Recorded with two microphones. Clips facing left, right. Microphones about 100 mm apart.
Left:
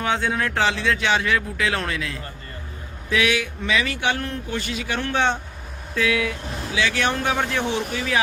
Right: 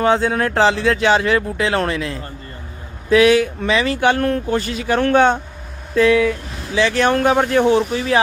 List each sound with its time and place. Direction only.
0.0 s speech: 40° right (ahead or behind)
4.0 s speech: 50° right (ahead or behind)
4.5 s speech: 40° right (ahead or behind)
7.1 s speech: 50° right (ahead or behind)